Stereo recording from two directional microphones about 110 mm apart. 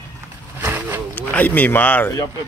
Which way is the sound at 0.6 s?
15° right (ahead or behind).